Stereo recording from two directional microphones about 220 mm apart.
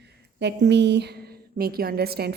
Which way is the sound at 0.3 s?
50° right (ahead or behind).